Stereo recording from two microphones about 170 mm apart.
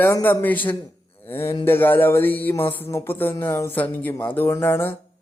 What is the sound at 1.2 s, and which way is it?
Speech, 15° left (ahead or behind).